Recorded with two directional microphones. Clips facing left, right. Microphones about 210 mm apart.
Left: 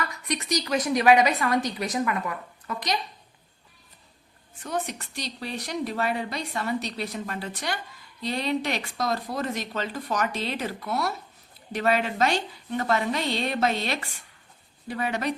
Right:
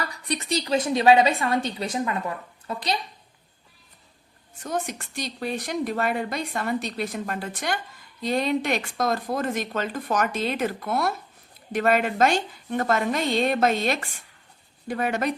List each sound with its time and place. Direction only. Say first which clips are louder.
0.0 s a woman's voice: right 1 dB; 30° right (ahead or behind)
4.6 s a woman's voice: right 1 dB; 45° right (ahead or behind)